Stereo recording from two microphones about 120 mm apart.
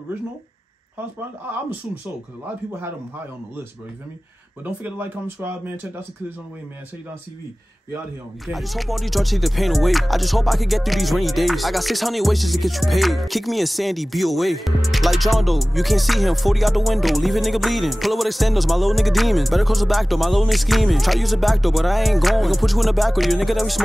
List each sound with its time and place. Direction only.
2.4 s speech: 20° right (ahead or behind)
4.6 s speech: 15° right (ahead or behind)
8.5 s speech: centre (ahead or behind)